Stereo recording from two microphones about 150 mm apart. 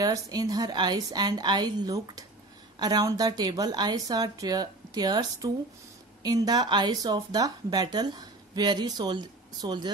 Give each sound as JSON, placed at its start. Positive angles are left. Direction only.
{"t": 0.0, "sound": "speech", "side_deg": -25}